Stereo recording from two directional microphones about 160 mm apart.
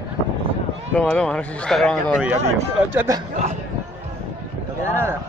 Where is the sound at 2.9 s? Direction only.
20° right (ahead or behind).